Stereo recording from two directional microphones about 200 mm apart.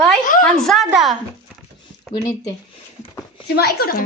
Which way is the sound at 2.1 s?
20° left (ahead or behind).